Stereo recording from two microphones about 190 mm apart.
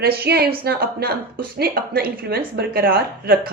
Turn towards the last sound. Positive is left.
turn(degrees=-50)  # may be behind; listen again after turning